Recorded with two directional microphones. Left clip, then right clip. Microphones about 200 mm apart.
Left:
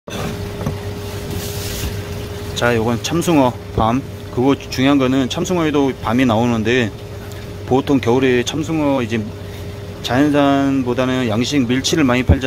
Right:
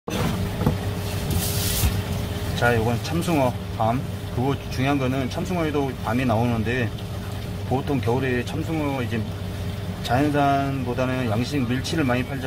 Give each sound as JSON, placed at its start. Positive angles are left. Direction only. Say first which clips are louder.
{"t": 2.6, "sound": "speech", "louder": "left 5 dB", "side_deg": 40}